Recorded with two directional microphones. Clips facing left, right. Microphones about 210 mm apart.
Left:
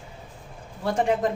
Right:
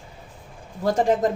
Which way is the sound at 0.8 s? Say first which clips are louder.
Right 3 dB; 40° right (ahead or behind).